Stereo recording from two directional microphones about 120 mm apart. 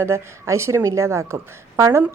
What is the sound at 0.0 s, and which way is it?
A woman's voice, 25° right (ahead or behind).